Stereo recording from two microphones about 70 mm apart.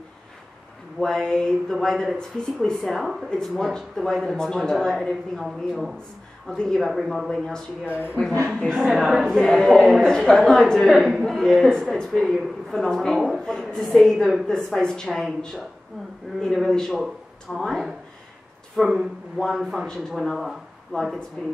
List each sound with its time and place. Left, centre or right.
0.9 s a woman's voice: centre
6.9 s a woman's voice: centre
7.8 s speech: right
8.5 s a woman's voice: centre
16.3 s a woman's voice: centre